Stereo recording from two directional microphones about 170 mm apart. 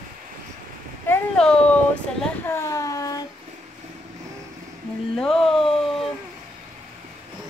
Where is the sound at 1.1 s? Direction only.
5° left (ahead or behind); by 3.2 s 20° left (ahead or behind).